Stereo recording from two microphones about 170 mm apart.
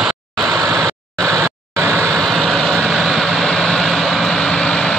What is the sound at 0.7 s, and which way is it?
Vehicle, centre (ahead or behind).